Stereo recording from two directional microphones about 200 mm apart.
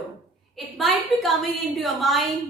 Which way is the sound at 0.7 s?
Centre (ahead or behind).